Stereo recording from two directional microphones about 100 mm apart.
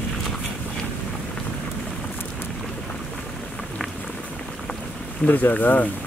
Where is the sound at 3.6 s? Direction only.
5° left (ahead or behind).